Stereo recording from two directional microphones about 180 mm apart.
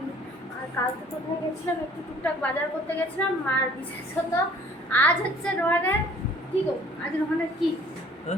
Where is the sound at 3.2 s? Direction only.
10° left (ahead or behind).